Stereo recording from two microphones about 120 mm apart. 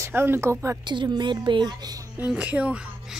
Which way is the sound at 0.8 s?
40° right (ahead or behind).